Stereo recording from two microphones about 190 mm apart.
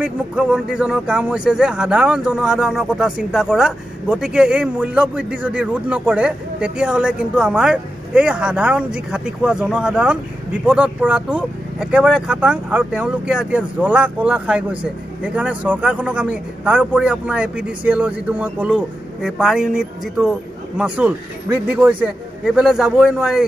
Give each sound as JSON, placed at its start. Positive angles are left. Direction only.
{"t": 0.0, "sound": "speech", "side_deg": -5}